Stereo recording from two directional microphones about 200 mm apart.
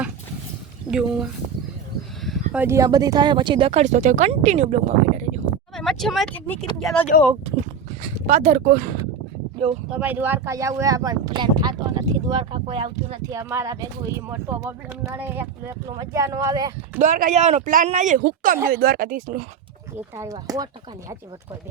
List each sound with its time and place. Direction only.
0.9 s speech: 5° right (ahead or behind)
2.5 s speech: 10° right (ahead or behind); by 5.4 s 35° right (ahead or behind)
5.7 s speech: centre (ahead or behind)
8.3 s speech: 35° right (ahead or behind)
8.7 s speech: 45° right (ahead or behind)
9.9 s speech: 10° right (ahead or behind); by 13.2 s 25° right (ahead or behind)
13.3 s speech: 15° right (ahead or behind)
17.0 s speech: 40° right (ahead or behind)
20.1 s speech: 15° right (ahead or behind)